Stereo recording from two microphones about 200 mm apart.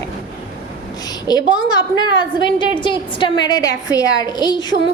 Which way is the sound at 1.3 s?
20° left (ahead or behind).